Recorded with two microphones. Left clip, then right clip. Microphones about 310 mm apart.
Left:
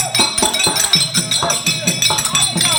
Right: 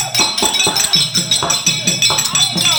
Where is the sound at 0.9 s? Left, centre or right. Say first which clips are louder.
Right 1 dB; centre.